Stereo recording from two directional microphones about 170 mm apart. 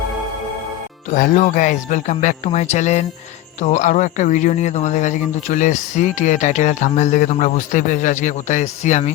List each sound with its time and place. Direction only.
1.1 s a man's voice: 50° left (ahead or behind)